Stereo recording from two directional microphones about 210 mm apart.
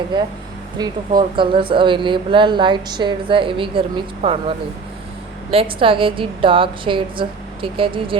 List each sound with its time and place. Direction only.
0.8 s speech: 20° right (ahead or behind)